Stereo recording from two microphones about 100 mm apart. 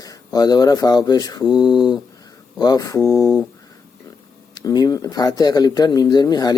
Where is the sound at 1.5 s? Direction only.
45° left (ahead or behind).